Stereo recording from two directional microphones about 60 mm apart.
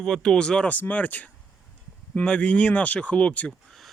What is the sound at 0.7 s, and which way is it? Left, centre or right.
Speech, left.